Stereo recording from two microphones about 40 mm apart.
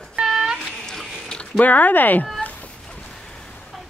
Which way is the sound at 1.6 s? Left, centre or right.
Left.